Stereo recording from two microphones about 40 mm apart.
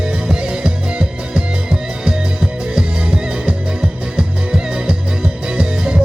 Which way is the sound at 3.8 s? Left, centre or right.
Centre.